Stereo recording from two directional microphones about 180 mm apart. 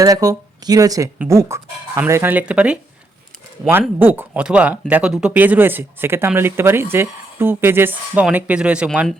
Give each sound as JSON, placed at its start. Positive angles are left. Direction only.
{"t": 0.0, "sound": "speech", "side_deg": -20}